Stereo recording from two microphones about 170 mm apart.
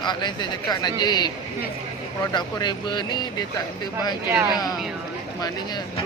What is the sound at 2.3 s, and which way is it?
Speech, 25° left (ahead or behind).